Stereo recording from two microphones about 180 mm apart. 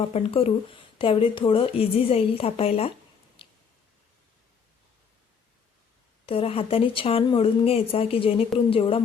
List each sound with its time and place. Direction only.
0.0 s speech: 35° left (ahead or behind)
3.4 s a sound: 30° left (ahead or behind)
6.2 s speech: 30° left (ahead or behind)